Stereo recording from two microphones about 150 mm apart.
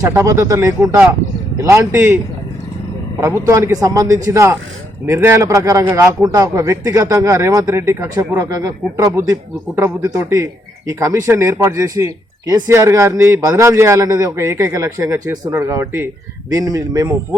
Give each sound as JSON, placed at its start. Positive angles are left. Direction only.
{"t": 0.0, "sound": "a man's voice", "side_deg": -20}
{"t": 3.2, "sound": "a man's voice", "side_deg": -20}